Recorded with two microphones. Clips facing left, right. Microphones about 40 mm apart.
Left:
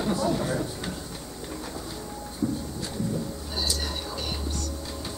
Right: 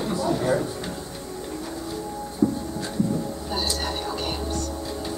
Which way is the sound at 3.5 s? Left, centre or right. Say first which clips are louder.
Right 4 dB; right.